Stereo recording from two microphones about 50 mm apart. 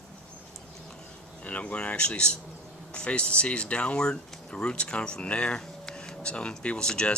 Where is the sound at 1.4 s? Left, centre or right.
Left.